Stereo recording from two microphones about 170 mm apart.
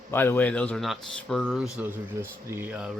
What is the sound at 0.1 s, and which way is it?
A man's voice, 10° left (ahead or behind).